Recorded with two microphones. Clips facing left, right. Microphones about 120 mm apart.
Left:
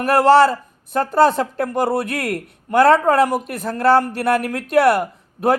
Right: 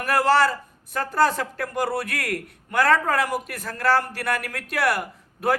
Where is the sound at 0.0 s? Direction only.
25° left (ahead or behind).